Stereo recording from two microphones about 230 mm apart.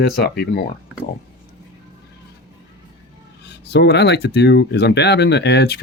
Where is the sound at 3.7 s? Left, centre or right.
Left.